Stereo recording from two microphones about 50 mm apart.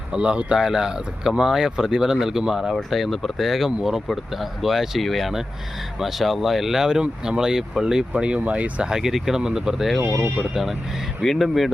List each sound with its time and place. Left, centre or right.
0.1 s speech: centre
2.7 s speech: centre
8.1 s speech: right
8.9 s speech: centre